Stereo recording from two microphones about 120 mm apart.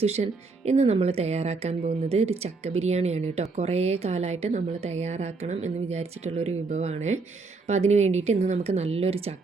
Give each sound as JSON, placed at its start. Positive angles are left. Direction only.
{"t": 0.0, "sound": "speech", "side_deg": -65}